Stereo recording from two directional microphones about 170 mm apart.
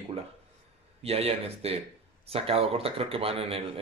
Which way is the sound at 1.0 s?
35° right (ahead or behind).